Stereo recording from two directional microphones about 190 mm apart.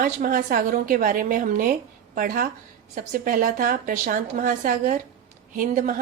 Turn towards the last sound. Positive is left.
turn(degrees=-45)  # may be behind; listen again after turning